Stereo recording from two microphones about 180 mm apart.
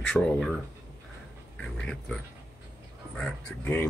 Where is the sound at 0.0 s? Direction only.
5° left (ahead or behind).